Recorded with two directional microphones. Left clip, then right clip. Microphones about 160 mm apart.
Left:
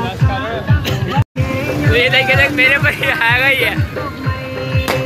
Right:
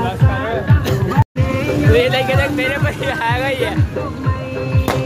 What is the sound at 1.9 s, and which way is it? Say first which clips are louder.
Music: left 3 dB; 40° right (ahead or behind).